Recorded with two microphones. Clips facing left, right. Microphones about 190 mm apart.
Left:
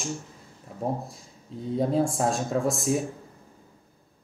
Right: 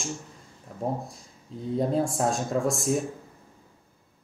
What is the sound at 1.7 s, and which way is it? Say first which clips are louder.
Speech: left 1 dB; centre (ahead or behind).